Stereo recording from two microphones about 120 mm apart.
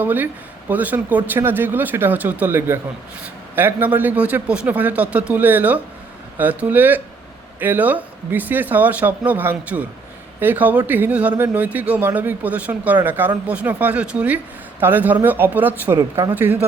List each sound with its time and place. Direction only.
0.0 s speech: 15° right (ahead or behind)